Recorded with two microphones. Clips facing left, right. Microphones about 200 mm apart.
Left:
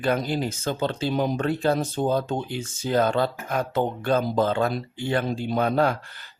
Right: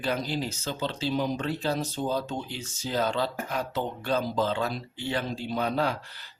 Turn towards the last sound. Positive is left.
turn(degrees=50)  # may be behind; listen again after turning